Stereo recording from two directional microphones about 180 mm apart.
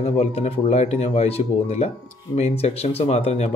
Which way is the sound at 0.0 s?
35° left (ahead or behind).